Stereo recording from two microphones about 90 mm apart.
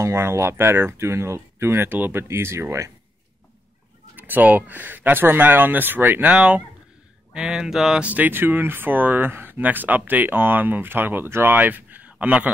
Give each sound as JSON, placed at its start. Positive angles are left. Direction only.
{"t": 0.0, "sound": "speech", "side_deg": -30}
{"t": 4.2, "sound": "speech", "side_deg": -20}
{"t": 8.0, "sound": "speech", "side_deg": -20}